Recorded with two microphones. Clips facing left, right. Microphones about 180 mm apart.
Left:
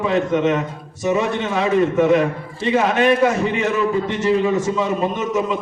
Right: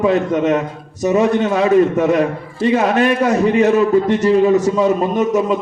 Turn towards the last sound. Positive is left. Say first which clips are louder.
# right 5 dB
turn(degrees=-40)  # may be behind; listen again after turning